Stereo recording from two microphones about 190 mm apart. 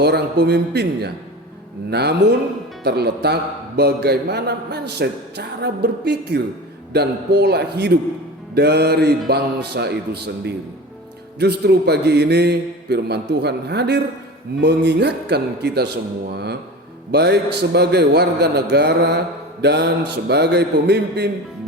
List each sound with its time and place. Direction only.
0.0 s a man's voice: 60° right (ahead or behind)